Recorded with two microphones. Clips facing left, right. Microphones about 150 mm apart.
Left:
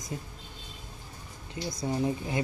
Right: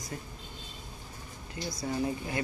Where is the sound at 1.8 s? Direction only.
20° left (ahead or behind).